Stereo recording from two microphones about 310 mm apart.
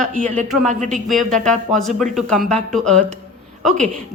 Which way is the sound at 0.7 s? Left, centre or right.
Right.